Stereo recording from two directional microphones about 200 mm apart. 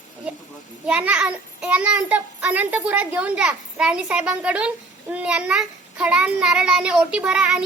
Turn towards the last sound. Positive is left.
turn(degrees=-5)  # may be behind; listen again after turning